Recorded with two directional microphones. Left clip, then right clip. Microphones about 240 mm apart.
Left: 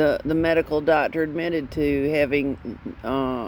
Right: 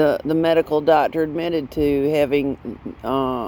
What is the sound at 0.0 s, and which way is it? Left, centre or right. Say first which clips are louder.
Speech: right 3 dB; right.